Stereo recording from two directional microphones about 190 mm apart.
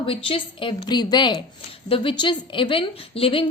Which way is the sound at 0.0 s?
30° left (ahead or behind).